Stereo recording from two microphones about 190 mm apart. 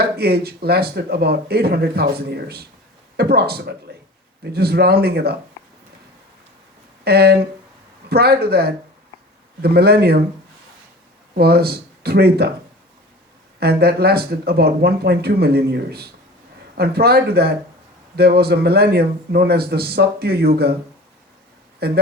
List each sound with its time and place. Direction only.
0.0 s speech: 55° right (ahead or behind)
7.0 s speech: 55° right (ahead or behind)
11.3 s speech: 55° right (ahead or behind)
13.6 s speech: 55° right (ahead or behind)
21.8 s speech: 55° right (ahead or behind)